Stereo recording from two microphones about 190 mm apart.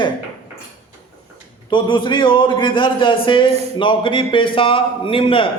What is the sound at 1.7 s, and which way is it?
A man's voice, 25° left (ahead or behind).